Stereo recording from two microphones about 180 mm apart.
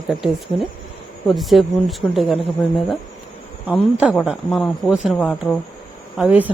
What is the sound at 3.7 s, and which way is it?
Speech, 5° right (ahead or behind).